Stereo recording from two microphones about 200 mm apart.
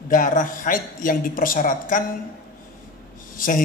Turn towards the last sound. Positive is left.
turn(degrees=45)  # may be behind; listen again after turning